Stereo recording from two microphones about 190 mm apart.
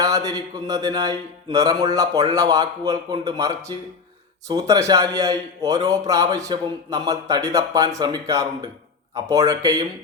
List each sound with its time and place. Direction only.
0.0 s speech: 20° right (ahead or behind)